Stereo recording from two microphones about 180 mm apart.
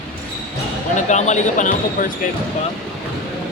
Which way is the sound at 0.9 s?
40° left (ahead or behind).